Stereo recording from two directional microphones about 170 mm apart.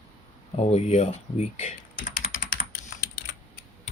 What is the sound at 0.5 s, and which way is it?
Speech, 40° left (ahead or behind).